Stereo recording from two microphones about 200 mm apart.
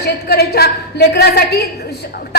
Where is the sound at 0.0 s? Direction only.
55° left (ahead or behind).